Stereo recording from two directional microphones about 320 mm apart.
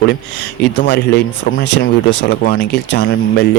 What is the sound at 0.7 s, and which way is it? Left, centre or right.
A man's voice, left.